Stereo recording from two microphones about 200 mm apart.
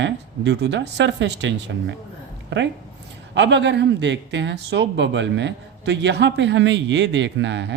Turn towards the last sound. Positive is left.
turn(degrees=-60)  # may be behind; listen again after turning